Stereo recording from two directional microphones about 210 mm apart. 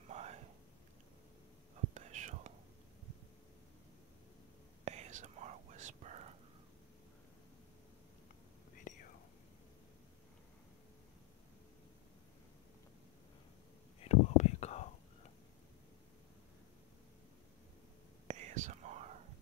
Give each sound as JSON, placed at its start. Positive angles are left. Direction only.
{"t": 0.1, "sound": "whispering", "side_deg": -30}
{"t": 2.0, "sound": "whispering", "side_deg": -35}
{"t": 4.8, "sound": "whispering", "side_deg": -30}
{"t": 8.9, "sound": "whispering", "side_deg": 35}
{"t": 14.0, "sound": "whispering", "side_deg": 30}
{"t": 18.2, "sound": "whispering", "side_deg": -30}